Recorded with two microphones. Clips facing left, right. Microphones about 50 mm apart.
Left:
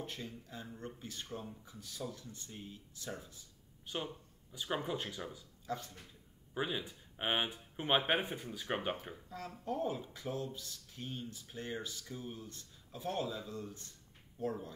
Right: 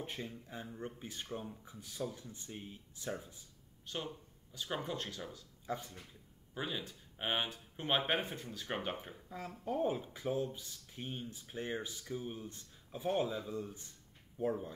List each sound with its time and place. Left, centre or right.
0.0 s speech: right
3.8 s speech: centre
5.7 s speech: centre
6.5 s speech: centre
9.3 s speech: centre